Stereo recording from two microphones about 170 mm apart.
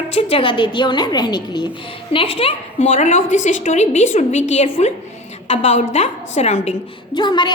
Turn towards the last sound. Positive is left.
turn(degrees=25)  # may be behind; listen again after turning